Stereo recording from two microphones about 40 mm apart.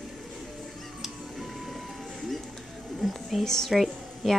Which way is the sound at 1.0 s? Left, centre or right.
Centre.